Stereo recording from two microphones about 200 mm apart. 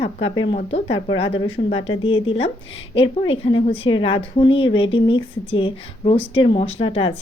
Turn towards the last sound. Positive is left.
turn(degrees=30)  # may be behind; listen again after turning